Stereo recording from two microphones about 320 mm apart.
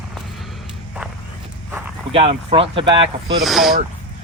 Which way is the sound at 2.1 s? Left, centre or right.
Centre.